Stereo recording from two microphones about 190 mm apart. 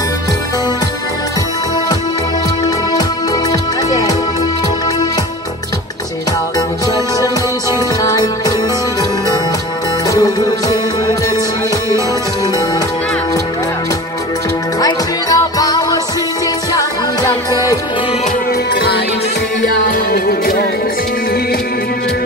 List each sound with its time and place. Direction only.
8.0 s music: 20° left (ahead or behind)
10.0 s music: 20° left (ahead or behind)
14.8 s music: 20° left (ahead or behind)
17.5 s music: 20° left (ahead or behind)
20.1 s music: 50° left (ahead or behind)